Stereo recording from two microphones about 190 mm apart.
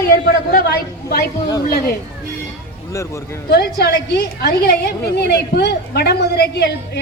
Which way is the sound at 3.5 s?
55° left (ahead or behind).